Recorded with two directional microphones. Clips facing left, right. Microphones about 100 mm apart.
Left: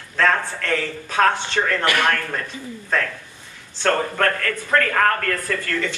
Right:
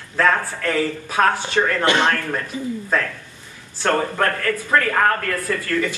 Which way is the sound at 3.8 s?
15° right (ahead or behind).